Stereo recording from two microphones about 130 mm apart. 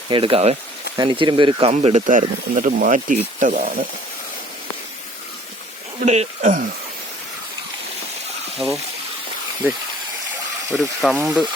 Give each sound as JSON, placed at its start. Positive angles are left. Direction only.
{"t": 0.1, "sound": "speech", "side_deg": -45}
{"t": 2.0, "sound": "speech", "side_deg": -80}
{"t": 6.1, "sound": "speech", "side_deg": -75}
{"t": 8.5, "sound": "speech", "side_deg": 0}
{"t": 10.7, "sound": "speech", "side_deg": 0}